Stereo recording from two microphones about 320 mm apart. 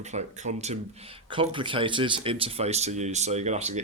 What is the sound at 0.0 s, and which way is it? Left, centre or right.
A woman's voice, right.